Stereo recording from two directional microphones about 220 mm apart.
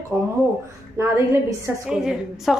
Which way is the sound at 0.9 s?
10° right (ahead or behind).